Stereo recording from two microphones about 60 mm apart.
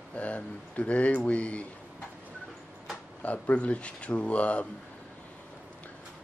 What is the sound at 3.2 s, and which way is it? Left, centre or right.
Speech, left.